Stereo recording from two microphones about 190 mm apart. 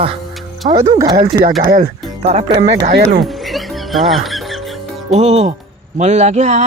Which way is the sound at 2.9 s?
60° right (ahead or behind).